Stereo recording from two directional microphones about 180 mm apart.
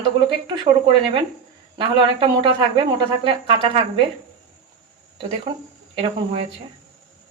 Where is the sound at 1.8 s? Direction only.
25° right (ahead or behind).